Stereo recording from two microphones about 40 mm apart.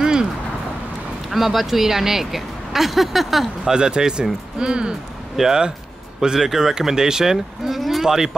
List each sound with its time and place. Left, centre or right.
0.0 s a sound: centre
1.3 s speech: centre
3.7 s speech: centre
8.1 s speech: centre